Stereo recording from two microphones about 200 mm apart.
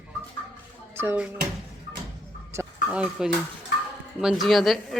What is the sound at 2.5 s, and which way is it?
A woman's voice, 5° right (ahead or behind).